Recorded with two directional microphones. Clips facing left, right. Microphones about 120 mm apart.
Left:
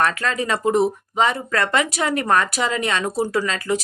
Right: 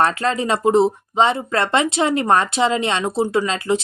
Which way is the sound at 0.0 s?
30° right (ahead or behind).